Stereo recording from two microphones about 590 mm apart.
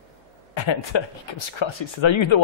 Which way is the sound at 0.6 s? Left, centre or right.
Left.